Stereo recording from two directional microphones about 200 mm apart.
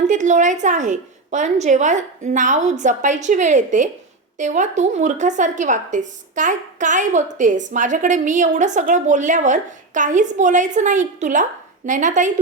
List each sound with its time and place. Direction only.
0.1 s a woman's voice: 35° right (ahead or behind)